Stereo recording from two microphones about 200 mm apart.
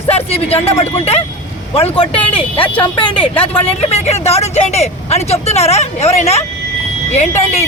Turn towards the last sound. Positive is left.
turn(degrees=35)  # may be behind; listen again after turning